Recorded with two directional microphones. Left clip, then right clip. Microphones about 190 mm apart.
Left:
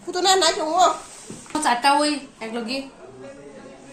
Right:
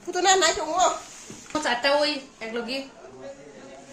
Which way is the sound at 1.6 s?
50° left (ahead or behind).